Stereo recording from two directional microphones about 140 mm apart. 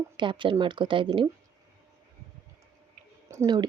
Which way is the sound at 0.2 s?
35° right (ahead or behind).